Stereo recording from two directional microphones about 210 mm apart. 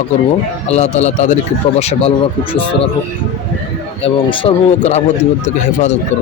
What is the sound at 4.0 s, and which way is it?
Speech, 25° left (ahead or behind).